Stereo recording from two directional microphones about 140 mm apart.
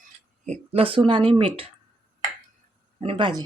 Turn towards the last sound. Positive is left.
turn(degrees=-35)  # may be behind; listen again after turning